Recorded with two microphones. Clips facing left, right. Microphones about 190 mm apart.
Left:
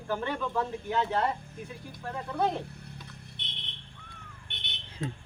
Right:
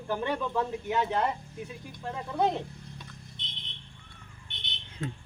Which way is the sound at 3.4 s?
65° left (ahead or behind).